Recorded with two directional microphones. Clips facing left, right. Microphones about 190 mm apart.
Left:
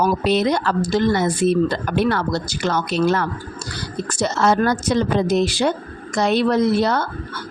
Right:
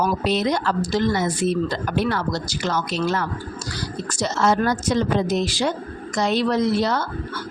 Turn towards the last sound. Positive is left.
turn(degrees=60)  # may be behind; listen again after turning